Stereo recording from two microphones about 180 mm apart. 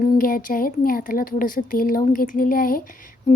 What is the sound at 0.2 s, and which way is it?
A woman's voice, 50° left (ahead or behind).